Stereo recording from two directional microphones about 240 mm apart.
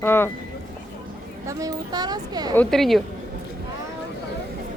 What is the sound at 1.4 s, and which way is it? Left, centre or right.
Speech, centre.